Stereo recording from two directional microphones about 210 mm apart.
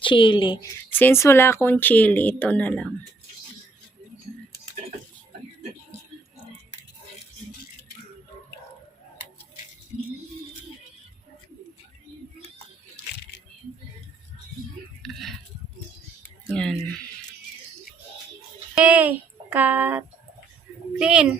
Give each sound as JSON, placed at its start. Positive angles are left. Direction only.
{"t": 0.0, "sound": "a woman's voice", "side_deg": 25}
{"t": 0.9, "sound": "speech", "side_deg": 10}
{"t": 15.0, "sound": "a sound", "side_deg": 0}
{"t": 16.5, "sound": "speech", "side_deg": 0}
{"t": 18.7, "sound": "speech", "side_deg": -5}